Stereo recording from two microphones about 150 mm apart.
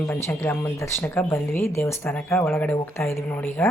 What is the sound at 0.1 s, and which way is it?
Speech, 15° left (ahead or behind).